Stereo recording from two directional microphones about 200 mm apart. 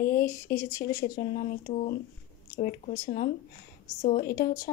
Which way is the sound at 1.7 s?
30° left (ahead or behind).